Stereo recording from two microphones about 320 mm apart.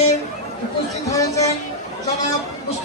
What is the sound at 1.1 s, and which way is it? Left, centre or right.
Speech, centre.